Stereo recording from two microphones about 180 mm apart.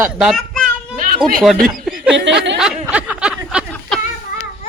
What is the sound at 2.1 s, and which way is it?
Speech, 85° right.